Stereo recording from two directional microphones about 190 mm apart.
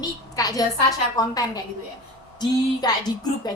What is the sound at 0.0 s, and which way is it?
A woman's voice, 20° left (ahead or behind).